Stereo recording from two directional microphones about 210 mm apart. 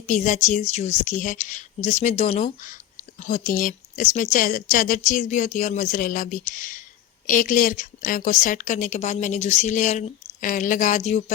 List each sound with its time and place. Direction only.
0.0 s a woman's voice: 35° left (ahead or behind)